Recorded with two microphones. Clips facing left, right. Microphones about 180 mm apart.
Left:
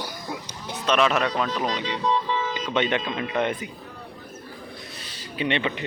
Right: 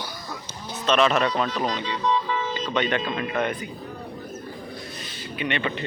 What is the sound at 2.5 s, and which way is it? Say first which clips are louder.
Music: even; 15° left (ahead or behind).